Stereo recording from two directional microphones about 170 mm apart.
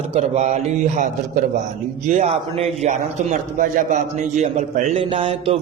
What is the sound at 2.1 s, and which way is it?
A man's voice, 40° right (ahead or behind).